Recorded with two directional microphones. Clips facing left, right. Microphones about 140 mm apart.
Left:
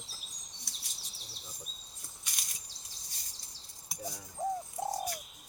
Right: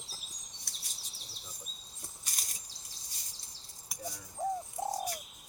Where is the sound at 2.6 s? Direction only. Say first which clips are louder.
Even; centre (ahead or behind).